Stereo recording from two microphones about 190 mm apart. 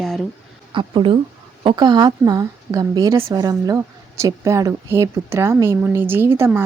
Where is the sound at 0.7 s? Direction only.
25° right (ahead or behind).